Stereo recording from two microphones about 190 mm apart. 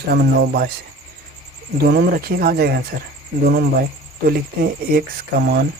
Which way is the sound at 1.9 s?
55° right (ahead or behind).